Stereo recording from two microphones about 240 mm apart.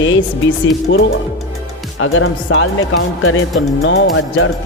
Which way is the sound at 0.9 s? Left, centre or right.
Left.